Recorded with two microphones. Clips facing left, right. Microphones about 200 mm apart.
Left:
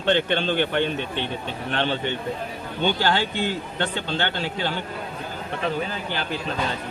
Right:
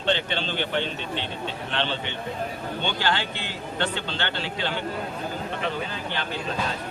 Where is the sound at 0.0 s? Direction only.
55° left (ahead or behind).